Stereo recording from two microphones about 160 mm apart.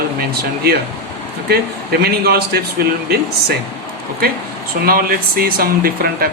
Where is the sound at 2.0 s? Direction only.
75° right (ahead or behind).